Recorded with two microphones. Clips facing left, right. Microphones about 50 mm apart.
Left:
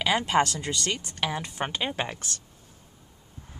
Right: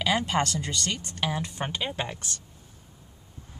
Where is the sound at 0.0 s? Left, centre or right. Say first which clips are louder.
Left 2 dB; left.